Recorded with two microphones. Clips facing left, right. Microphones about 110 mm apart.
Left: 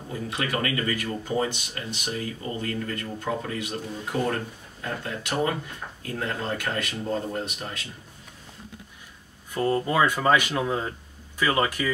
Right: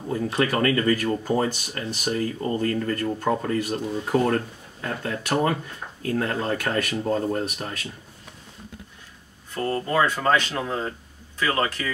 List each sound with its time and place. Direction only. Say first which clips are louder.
0.1 s speech: right 6 dB; 45° right (ahead or behind)
9.5 s speech: left 1 dB; 15° left (ahead or behind)